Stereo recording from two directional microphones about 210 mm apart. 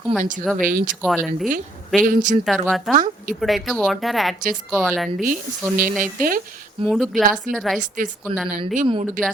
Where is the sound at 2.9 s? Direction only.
40° right (ahead or behind).